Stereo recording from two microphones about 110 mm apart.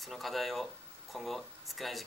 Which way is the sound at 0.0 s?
Centre (ahead or behind).